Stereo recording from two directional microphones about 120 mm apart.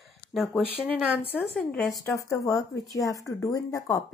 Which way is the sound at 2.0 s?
30° left (ahead or behind).